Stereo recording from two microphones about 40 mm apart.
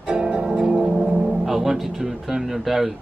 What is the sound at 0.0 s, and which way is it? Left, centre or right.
Music, right.